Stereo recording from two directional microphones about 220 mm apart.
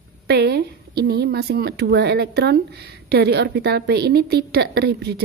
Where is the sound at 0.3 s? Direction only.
50° right (ahead or behind).